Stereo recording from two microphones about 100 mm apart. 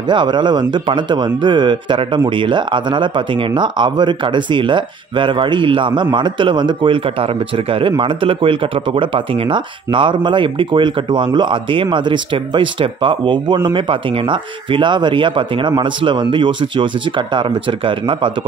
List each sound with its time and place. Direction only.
0.1 s speech: 50° right (ahead or behind)